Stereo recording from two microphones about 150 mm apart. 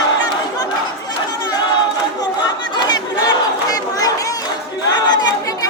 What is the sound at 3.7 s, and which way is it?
Chatter, 25° left (ahead or behind).